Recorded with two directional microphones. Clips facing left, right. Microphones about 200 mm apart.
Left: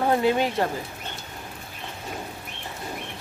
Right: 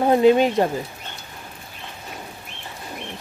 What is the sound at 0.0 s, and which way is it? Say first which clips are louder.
Speech: right 6 dB; 20° right (ahead or behind).